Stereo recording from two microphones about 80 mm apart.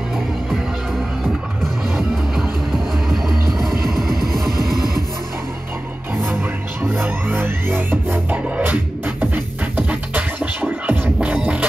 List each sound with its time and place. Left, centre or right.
1.2 s music: centre
6.2 s music: right